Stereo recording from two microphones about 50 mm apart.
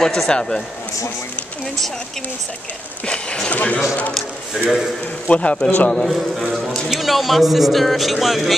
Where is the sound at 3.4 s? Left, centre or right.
Left.